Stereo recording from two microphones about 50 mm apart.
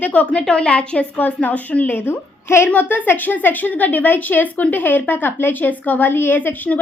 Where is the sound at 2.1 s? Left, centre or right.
Left.